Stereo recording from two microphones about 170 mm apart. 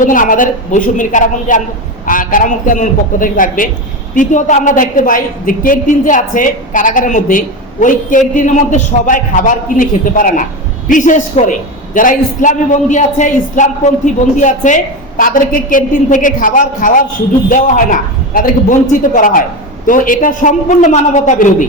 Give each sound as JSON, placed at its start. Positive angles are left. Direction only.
{"t": 0.0, "sound": "a woman's voice", "side_deg": 50}
{"t": 18.3, "sound": "a woman's voice", "side_deg": 50}